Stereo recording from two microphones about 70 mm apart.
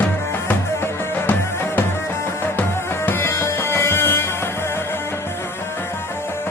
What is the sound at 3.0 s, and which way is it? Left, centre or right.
Music, left.